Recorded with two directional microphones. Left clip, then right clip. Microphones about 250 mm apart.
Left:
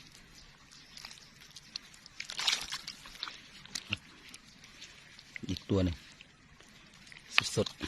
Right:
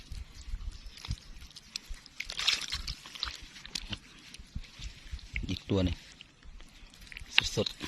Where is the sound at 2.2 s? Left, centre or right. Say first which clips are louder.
Right 2 dB; left.